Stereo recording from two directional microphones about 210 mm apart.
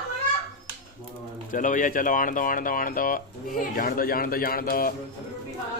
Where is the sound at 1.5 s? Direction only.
40° left (ahead or behind).